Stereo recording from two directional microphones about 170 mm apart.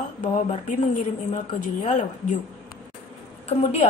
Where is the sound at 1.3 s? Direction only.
50° left (ahead or behind).